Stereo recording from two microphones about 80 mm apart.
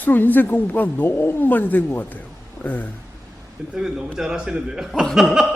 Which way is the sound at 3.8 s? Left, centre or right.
Centre.